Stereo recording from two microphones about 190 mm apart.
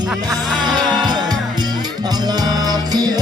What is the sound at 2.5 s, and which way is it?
Music, 20° right (ahead or behind).